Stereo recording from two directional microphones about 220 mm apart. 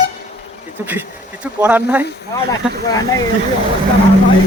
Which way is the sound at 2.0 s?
50° left (ahead or behind).